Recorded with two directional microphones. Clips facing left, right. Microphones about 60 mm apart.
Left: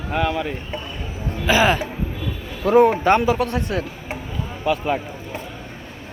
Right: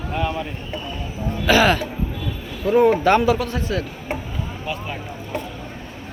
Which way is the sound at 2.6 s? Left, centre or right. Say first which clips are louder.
Left 1 dB; left.